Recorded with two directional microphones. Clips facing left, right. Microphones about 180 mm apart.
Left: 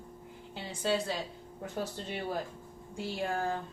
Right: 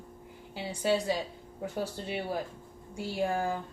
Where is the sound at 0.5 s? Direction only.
10° right (ahead or behind).